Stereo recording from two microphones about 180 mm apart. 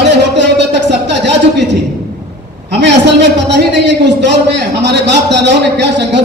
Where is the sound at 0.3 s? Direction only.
75° right (ahead or behind).